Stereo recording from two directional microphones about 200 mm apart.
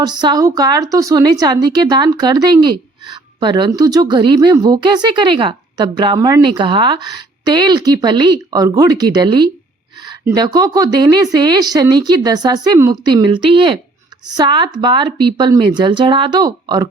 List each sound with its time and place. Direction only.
0.2 s a woman's voice: 20° right (ahead or behind)